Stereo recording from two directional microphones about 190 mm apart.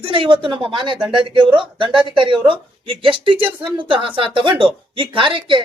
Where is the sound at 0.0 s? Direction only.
25° right (ahead or behind).